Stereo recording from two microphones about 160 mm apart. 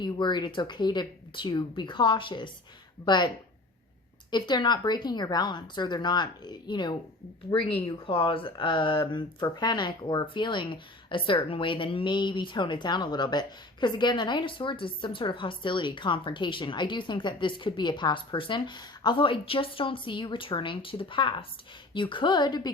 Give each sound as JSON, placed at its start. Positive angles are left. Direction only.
{"t": 0.0, "sound": "a woman's voice", "side_deg": 30}